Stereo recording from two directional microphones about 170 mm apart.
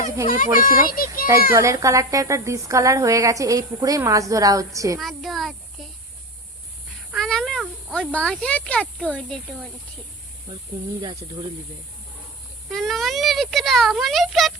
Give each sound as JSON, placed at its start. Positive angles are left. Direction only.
{"t": 0.3, "sound": "a child's voice", "side_deg": 55}
{"t": 1.5, "sound": "a woman's voice", "side_deg": -20}
{"t": 4.9, "sound": "a woman's voice", "side_deg": 0}
{"t": 7.1, "sound": "speech", "side_deg": 0}
{"t": 8.1, "sound": "speech", "side_deg": 5}
{"t": 12.6, "sound": "speech", "side_deg": 0}